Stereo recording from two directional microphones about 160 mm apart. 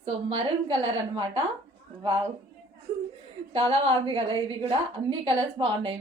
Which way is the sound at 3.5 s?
40° right (ahead or behind).